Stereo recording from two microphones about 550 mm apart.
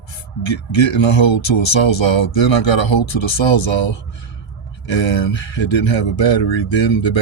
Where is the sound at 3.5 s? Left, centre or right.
Left.